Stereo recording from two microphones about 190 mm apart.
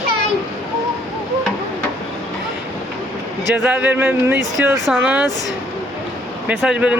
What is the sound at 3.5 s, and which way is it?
Speech, 10° right (ahead or behind).